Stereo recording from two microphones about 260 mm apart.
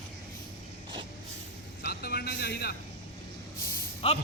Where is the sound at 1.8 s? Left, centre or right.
Left.